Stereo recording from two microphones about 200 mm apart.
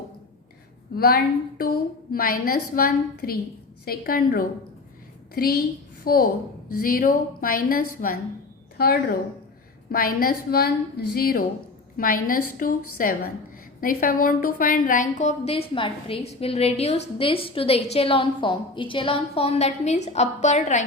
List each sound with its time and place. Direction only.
0.9 s a woman's voice: 50° left (ahead or behind)
8.8 s a woman's voice: 50° left (ahead or behind)